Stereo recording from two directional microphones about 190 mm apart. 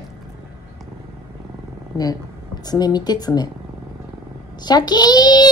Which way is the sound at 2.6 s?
20° left (ahead or behind).